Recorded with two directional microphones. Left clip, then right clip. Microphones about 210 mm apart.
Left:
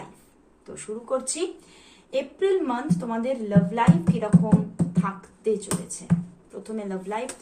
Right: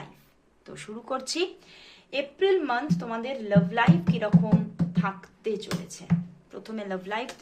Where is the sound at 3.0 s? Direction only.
50° right (ahead or behind).